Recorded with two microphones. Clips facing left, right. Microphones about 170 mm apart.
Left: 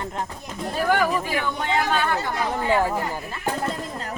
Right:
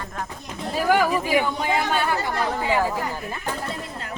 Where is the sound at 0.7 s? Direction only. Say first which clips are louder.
Right 1 dB; 10° right (ahead or behind).